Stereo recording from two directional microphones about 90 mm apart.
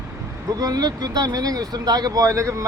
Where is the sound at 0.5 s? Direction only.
45° right (ahead or behind).